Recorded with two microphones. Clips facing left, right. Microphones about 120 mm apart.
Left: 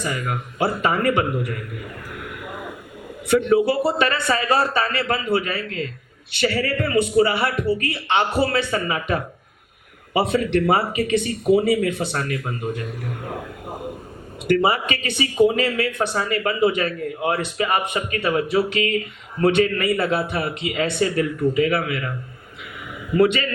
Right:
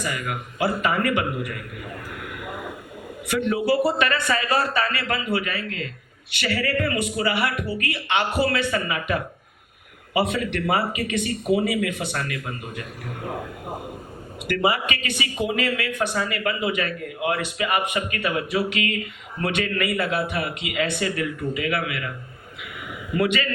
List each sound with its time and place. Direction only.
0.0 s speech: 30° left (ahead or behind)
3.2 s speech: 30° left (ahead or behind)
14.4 s speech: 30° left (ahead or behind)
23.1 s a man's voice: 30° left (ahead or behind)